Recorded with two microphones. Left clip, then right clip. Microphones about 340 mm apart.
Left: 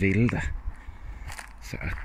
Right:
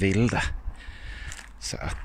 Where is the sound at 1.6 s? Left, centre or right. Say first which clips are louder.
Right 4 dB; right.